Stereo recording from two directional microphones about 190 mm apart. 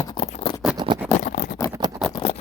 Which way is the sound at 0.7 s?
25° right (ahead or behind).